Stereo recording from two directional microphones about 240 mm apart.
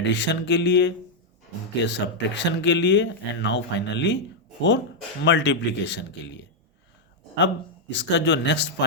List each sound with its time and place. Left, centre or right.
0.0 s speech: left
5.2 s speech: left